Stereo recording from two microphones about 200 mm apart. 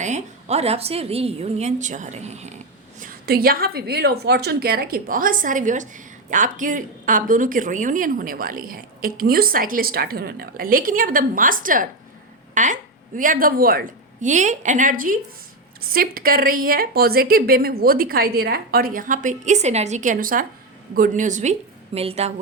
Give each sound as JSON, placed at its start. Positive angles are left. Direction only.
{"t": 0.0, "sound": "a woman's voice", "side_deg": -35}
{"t": 3.0, "sound": "a woman's voice", "side_deg": -50}